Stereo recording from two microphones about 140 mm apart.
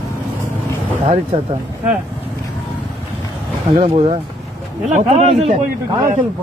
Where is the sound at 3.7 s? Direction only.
40° right (ahead or behind).